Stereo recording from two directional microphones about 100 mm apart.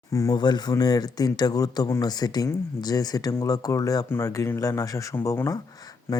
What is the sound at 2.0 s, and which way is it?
Speech, 45° left (ahead or behind).